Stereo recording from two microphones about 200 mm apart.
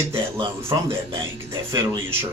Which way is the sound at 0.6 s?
15° right (ahead or behind).